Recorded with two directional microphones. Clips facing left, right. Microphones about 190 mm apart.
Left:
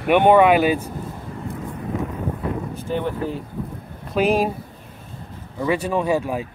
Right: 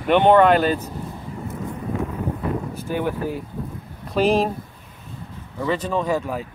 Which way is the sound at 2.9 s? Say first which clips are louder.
Even; 10° right (ahead or behind).